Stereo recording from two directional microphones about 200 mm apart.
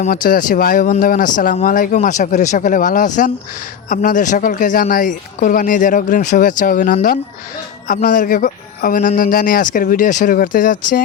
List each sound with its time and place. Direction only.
0.0 s speech: 45° left (ahead or behind)